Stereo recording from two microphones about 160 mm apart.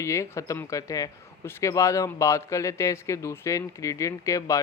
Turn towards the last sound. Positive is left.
turn(degrees=20)  # may be behind; listen again after turning